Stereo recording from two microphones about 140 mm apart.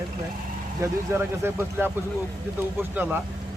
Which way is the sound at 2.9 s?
15° right (ahead or behind).